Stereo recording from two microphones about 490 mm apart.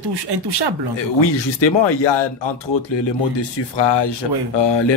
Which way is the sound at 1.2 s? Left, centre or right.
Left.